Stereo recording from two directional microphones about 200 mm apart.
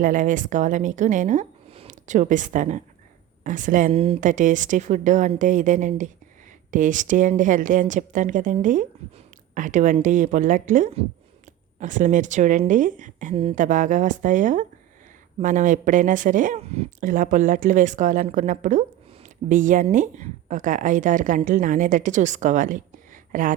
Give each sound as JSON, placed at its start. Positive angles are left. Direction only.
{"t": 0.0, "sound": "a woman's voice", "side_deg": -40}